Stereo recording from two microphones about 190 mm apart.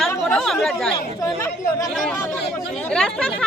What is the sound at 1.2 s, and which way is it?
Speech, 15° left (ahead or behind).